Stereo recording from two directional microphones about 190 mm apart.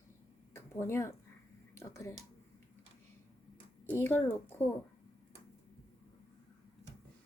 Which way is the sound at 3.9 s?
10° left (ahead or behind).